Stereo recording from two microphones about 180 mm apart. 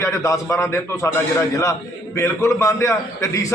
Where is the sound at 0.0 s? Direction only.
15° left (ahead or behind).